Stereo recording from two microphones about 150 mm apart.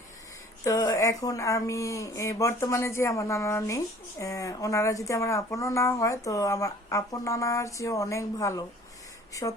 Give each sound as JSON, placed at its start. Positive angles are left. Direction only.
{"t": 0.6, "sound": "a woman's voice", "side_deg": 25}